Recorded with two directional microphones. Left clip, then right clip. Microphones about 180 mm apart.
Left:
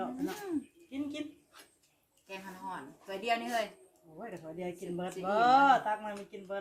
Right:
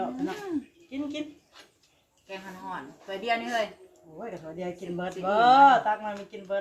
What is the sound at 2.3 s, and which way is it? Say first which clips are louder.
A woman's voice: right 5 dB; centre (ahead or behind).